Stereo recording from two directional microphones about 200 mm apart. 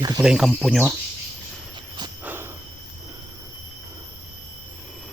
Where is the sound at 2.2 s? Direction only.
10° right (ahead or behind).